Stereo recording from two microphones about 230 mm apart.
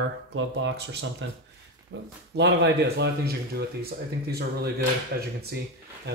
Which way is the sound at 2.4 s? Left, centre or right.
Right.